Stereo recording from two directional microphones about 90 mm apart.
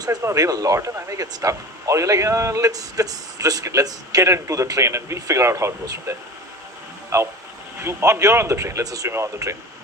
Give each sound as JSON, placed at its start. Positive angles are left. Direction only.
{"t": 0.2, "sound": "speech", "side_deg": -35}